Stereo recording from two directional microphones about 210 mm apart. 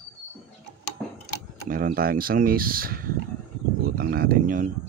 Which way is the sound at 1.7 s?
45° right (ahead or behind).